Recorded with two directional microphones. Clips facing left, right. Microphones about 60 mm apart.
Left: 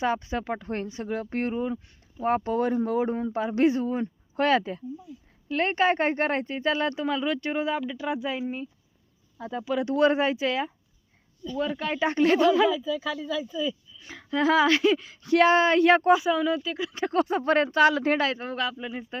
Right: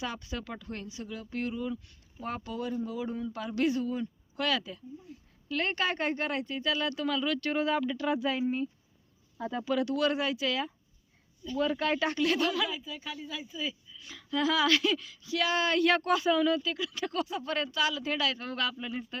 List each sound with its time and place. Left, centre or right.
0.0 s speech: left
5.1 s speech: right
5.5 s speech: left; by 9.7 s centre
9.7 s speech: left
11.5 s speech: centre
12.1 s speech: left
14.0 s speech: left
15.2 s speech: left
15.5 s speech: left
16.1 s speech: centre
16.7 s speech: left
17.2 s speech: left
18.3 s speech: centre